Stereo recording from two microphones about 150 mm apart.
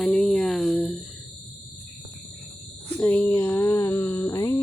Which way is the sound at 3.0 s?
10° left (ahead or behind).